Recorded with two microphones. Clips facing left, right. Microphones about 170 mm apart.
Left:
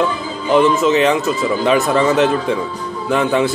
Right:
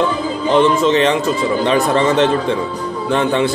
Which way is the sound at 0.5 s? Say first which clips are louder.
Even; 30° right (ahead or behind).